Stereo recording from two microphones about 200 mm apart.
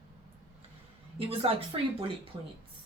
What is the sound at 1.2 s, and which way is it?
Speech, 30° right (ahead or behind).